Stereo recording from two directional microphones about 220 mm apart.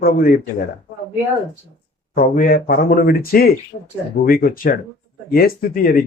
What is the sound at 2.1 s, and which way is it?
Speech, 40° left (ahead or behind).